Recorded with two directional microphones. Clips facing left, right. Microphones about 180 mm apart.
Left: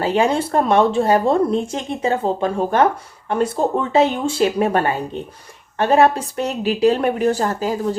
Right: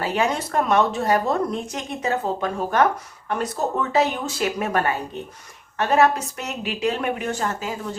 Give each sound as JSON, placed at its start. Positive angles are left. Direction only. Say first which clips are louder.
{"t": 0.0, "sound": "speech", "louder": "left 6 dB", "side_deg": 30}